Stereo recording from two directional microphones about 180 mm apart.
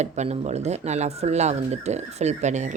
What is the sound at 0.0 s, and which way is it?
Speech, 40° right (ahead or behind).